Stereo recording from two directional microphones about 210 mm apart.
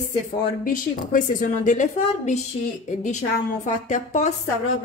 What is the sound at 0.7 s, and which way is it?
A woman's voice, 40° left (ahead or behind).